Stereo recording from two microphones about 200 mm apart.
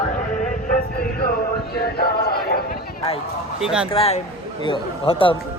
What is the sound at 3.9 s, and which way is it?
Speech, 30° left (ahead or behind).